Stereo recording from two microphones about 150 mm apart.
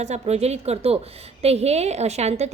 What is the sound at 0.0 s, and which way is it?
A woman's voice, 45° right (ahead or behind).